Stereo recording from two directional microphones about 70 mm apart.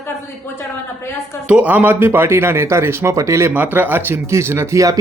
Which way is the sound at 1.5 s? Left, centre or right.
Right.